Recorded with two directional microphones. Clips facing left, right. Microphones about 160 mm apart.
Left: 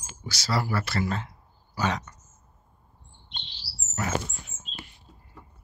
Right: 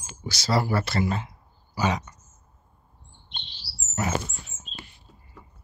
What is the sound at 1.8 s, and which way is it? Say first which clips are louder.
Speech: right 2 dB; 10° right (ahead or behind).